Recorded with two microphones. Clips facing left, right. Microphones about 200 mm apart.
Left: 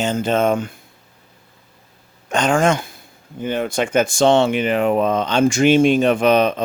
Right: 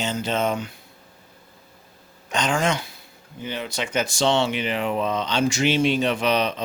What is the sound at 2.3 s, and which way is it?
Speech, 50° left (ahead or behind).